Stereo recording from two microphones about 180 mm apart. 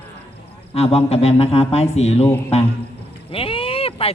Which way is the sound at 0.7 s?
35° left (ahead or behind).